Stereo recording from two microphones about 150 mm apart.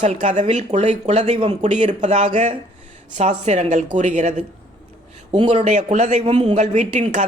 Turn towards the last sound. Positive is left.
turn(degrees=-50)  # may be behind; listen again after turning